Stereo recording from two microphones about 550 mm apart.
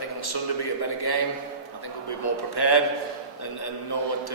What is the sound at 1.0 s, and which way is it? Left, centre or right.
Speech, left.